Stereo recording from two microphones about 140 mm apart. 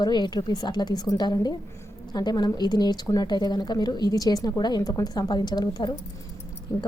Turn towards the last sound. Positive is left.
turn(degrees=25)  # may be behind; listen again after turning